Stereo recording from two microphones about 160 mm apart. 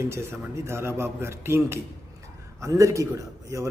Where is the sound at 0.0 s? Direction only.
15° right (ahead or behind).